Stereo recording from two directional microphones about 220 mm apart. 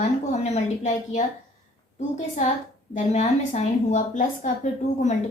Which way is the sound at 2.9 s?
30° left (ahead or behind).